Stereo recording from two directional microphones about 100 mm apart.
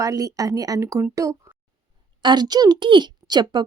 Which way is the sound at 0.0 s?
35° right (ahead or behind).